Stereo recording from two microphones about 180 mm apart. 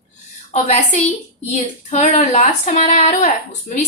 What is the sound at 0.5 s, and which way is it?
A woman's voice, 35° left (ahead or behind).